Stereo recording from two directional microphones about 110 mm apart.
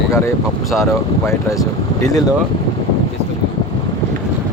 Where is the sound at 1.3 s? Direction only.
30° left (ahead or behind).